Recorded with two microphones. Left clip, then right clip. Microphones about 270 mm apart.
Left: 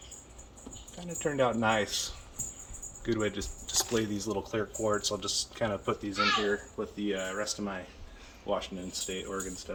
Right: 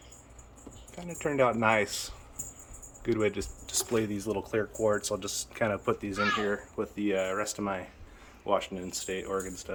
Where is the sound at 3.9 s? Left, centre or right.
Right.